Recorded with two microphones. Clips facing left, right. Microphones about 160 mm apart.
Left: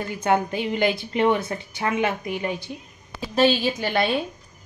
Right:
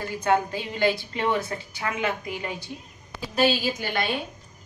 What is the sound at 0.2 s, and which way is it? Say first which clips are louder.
Speech: left 2 dB; 20° left (ahead or behind).